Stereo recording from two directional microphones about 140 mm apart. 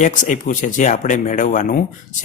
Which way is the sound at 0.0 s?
70° left (ahead or behind).